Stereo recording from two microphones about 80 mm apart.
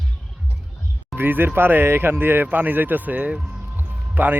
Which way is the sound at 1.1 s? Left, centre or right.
Right.